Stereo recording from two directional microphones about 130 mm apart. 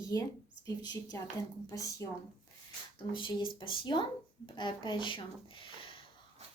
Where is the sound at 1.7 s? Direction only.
25° left (ahead or behind).